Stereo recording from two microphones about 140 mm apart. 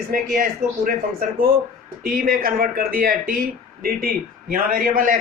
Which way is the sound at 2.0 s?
90° right.